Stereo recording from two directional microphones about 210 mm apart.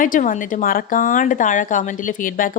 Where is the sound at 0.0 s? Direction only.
40° left (ahead or behind).